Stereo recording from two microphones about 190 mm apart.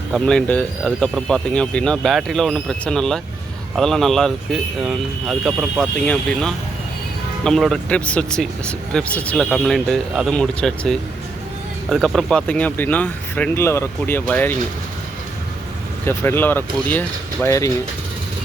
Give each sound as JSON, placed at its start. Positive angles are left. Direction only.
{"t": 0.1, "sound": "speech", "side_deg": 5}
{"t": 16.0, "sound": "speech", "side_deg": 10}